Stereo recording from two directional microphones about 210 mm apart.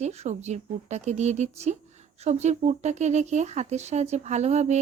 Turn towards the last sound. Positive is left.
turn(degrees=-30)  # may be behind; listen again after turning